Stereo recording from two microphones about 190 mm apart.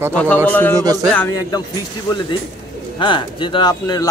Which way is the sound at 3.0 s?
25° left (ahead or behind).